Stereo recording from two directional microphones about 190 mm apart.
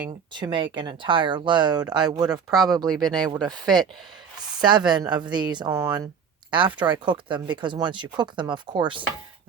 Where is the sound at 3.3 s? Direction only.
20° right (ahead or behind).